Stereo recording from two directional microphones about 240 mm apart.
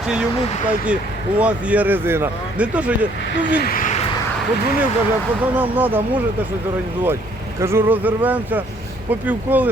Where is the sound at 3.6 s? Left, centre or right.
Left.